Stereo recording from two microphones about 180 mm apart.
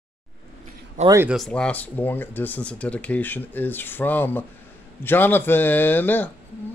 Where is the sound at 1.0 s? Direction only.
15° right (ahead or behind).